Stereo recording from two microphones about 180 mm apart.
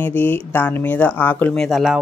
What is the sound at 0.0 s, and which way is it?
A woman's voice, 10° left (ahead or behind).